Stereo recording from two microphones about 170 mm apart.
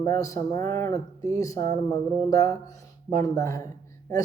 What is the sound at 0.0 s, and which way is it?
Speech, 15° left (ahead or behind).